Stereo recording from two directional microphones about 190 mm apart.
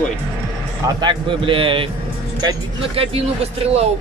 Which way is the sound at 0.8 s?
25° right (ahead or behind).